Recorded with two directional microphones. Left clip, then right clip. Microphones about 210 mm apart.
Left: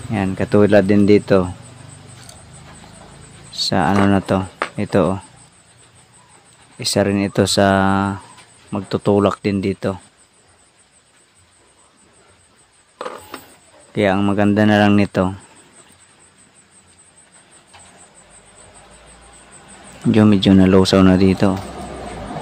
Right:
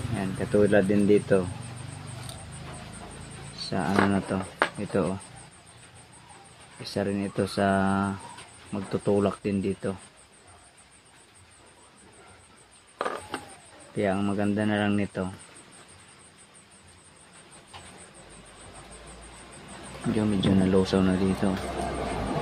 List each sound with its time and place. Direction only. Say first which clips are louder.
0.2 s speech: left 9 dB; 55° left (ahead or behind)
3.5 s speech: left 10 dB; 55° left (ahead or behind)
6.8 s speech: left 13 dB; 55° left (ahead or behind)
13.9 s speech: left 11 dB; 50° left (ahead or behind)
20.2 s speech: left 13 dB; 55° left (ahead or behind)